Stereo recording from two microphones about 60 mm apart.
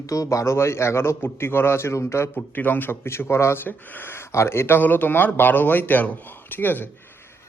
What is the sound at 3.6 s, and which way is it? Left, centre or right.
Speech, left.